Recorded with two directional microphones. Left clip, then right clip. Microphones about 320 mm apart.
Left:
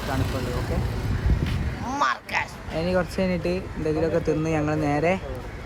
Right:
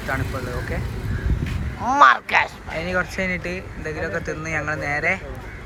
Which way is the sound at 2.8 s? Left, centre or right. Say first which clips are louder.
Right 1 dB; centre.